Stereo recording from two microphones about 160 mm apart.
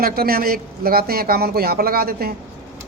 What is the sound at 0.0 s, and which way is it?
Speech, 70° right (ahead or behind).